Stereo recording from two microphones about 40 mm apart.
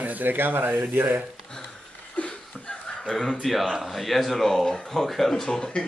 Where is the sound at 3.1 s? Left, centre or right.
Centre.